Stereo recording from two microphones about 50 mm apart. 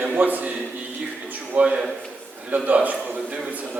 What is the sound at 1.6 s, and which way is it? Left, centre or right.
Speech, centre.